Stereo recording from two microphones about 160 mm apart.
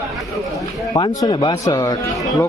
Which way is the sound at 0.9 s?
20° left (ahead or behind).